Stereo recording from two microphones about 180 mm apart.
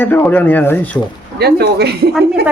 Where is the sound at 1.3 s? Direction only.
65° right (ahead or behind).